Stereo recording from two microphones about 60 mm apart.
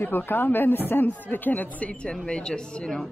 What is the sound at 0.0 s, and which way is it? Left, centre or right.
Speech, left.